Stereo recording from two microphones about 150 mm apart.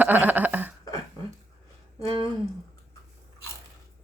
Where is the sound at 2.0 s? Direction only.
35° right (ahead or behind).